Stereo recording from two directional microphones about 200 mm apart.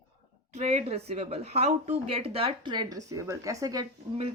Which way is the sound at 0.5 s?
35° right (ahead or behind).